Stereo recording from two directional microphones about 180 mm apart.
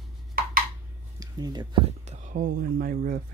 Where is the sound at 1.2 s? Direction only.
20° right (ahead or behind).